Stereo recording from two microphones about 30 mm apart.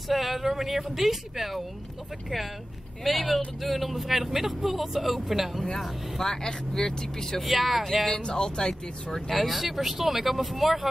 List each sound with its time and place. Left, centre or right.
0.1 s speech: centre
3.0 s speech: centre
6.2 s speech: left
7.4 s speech: centre
7.8 s speech: centre
8.2 s speech: left
9.3 s speech: centre